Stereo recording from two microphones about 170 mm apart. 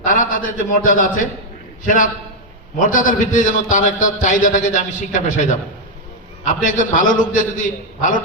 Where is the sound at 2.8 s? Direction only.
50° left (ahead or behind).